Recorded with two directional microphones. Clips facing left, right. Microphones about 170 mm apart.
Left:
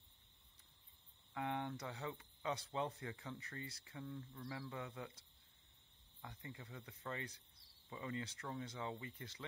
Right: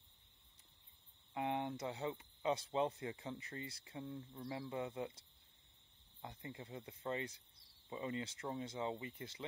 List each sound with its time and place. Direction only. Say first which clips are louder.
1.3 s speech: right 3 dB; 20° right (ahead or behind)
6.2 s speech: right 4 dB; 25° right (ahead or behind)